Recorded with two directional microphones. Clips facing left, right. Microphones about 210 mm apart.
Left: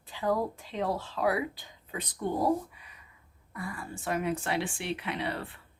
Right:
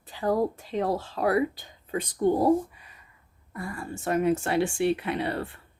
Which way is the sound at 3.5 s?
45° right (ahead or behind).